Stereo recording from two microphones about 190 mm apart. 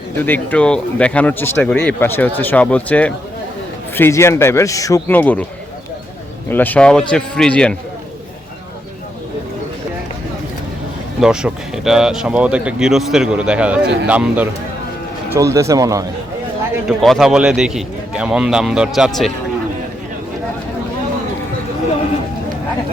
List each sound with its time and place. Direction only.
0.2 s speech: 10° left (ahead or behind)
6.5 s speech: 10° left (ahead or behind)
11.2 s speech: 5° right (ahead or behind)
17.0 s speech: centre (ahead or behind)